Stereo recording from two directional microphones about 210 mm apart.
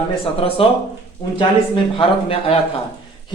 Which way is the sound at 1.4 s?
25° left (ahead or behind).